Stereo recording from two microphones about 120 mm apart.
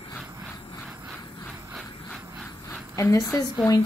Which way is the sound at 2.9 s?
25° left (ahead or behind).